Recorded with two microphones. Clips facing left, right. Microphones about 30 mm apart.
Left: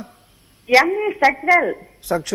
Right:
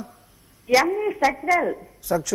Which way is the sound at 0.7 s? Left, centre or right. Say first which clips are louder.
Left 4 dB; left.